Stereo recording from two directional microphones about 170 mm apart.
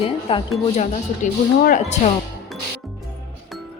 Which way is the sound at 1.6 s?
45° left (ahead or behind).